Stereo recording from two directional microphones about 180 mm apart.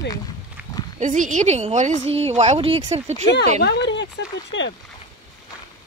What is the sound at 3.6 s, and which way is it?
Speech, 75° left (ahead or behind).